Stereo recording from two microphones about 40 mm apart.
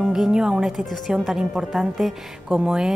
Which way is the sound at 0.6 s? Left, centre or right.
Centre.